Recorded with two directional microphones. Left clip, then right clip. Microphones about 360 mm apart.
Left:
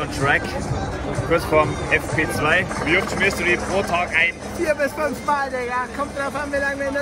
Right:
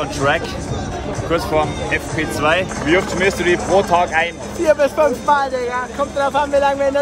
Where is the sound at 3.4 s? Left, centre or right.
Right.